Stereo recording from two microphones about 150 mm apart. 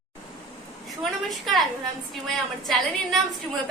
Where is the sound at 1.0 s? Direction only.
Centre (ahead or behind).